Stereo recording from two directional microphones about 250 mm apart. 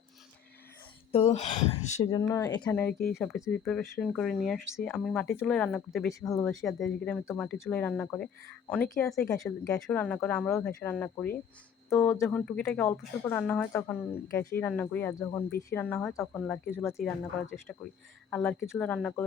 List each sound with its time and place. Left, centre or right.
1.1 s speech: left; by 6.1 s centre
6.2 s speech: centre
6.6 s speech: centre